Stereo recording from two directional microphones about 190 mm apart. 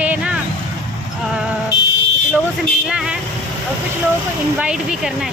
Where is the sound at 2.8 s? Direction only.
5° right (ahead or behind).